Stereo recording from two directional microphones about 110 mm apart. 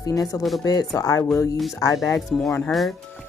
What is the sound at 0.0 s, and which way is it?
Speech, 35° left (ahead or behind).